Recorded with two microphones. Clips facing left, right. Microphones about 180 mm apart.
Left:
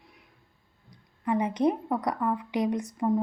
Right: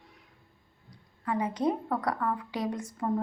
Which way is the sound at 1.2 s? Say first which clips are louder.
Left 4 dB; 20° left (ahead or behind).